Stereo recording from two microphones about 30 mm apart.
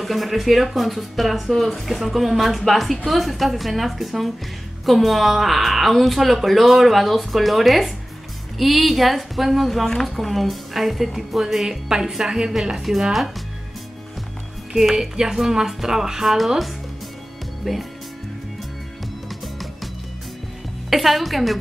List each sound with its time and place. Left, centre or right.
0.0 s a woman's voice: centre; by 12.5 s right
12.7 s speech: centre
15.0 s speech: centre
17.6 s speech: centre
19.2 s music: centre
20.9 s a woman's voice: centre